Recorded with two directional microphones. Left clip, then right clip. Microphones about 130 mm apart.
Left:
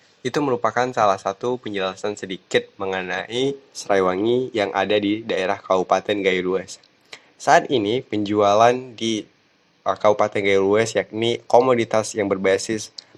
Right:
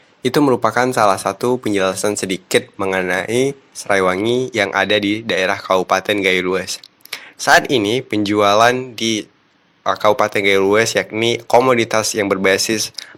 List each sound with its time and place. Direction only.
0.2 s speech: 35° right (ahead or behind)